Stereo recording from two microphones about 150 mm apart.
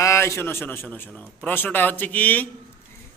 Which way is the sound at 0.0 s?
20° left (ahead or behind).